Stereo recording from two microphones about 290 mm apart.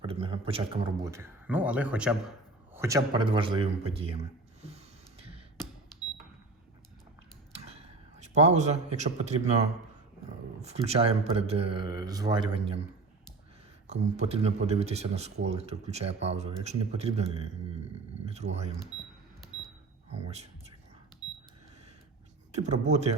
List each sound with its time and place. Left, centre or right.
0.0 s a man's voice: centre
7.5 s a man's voice: right
13.8 s speech: right
20.1 s speech: right
21.2 s alarm clock: left
22.5 s speech: right